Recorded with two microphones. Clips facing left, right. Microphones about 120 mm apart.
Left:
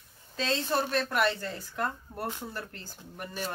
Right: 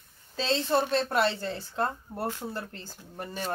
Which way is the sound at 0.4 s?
30° right (ahead or behind).